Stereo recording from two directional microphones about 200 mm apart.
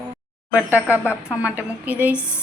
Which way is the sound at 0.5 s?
5° right (ahead or behind).